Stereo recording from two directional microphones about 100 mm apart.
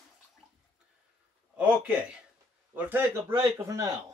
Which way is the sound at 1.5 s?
10° right (ahead or behind).